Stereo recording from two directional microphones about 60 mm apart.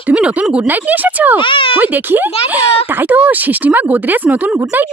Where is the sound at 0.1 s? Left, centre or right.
Centre.